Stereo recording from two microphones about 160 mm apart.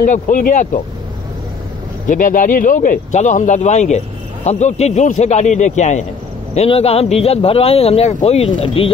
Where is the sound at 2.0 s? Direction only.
55° left (ahead or behind).